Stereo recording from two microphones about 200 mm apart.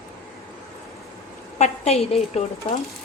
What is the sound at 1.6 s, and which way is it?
A woman's voice, 30° left (ahead or behind).